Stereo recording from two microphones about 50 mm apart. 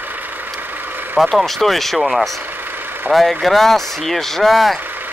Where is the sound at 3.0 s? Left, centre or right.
Centre.